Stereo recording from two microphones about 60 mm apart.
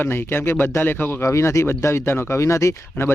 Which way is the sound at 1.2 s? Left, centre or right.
Left.